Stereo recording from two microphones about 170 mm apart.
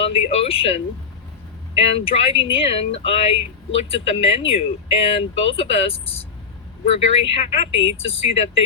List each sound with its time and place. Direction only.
0.0 s speech: 35° left (ahead or behind)